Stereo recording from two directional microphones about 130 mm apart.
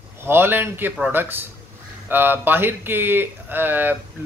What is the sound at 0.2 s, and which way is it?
Speech, 15° right (ahead or behind).